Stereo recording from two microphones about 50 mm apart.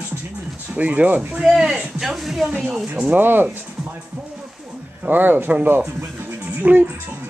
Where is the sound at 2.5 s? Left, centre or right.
Right.